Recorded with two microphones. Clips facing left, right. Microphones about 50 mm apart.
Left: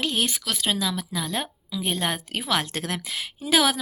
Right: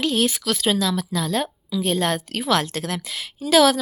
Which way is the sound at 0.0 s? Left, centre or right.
Centre.